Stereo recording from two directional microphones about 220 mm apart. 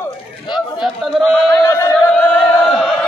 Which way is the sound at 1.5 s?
15° left (ahead or behind).